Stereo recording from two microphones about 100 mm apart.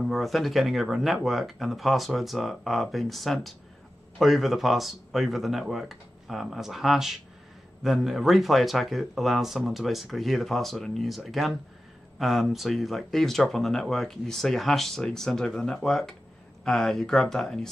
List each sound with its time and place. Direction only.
0.0 s speech: centre (ahead or behind)